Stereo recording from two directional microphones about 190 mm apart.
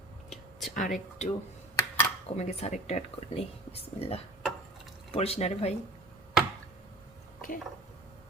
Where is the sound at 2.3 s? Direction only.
35° left (ahead or behind).